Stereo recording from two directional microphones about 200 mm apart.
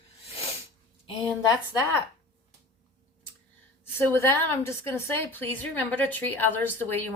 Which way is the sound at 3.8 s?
10° left (ahead or behind).